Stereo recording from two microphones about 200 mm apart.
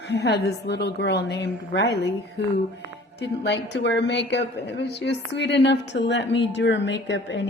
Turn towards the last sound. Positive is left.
turn(degrees=65)  # may be behind; listen again after turning